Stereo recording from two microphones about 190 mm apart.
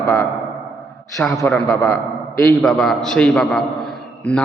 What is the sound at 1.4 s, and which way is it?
A man's voice, 15° left (ahead or behind).